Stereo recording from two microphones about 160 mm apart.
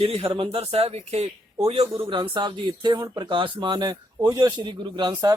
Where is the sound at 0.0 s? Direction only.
35° right (ahead or behind).